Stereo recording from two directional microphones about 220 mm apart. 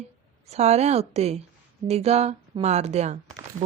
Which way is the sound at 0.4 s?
30° right (ahead or behind).